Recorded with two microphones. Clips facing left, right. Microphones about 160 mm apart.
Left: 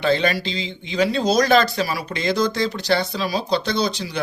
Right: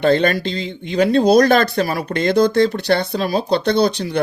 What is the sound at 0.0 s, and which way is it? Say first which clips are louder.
Speech: right 5 dB; 50° right (ahead or behind).